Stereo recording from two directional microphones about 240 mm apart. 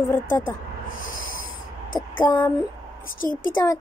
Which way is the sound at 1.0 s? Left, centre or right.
Left.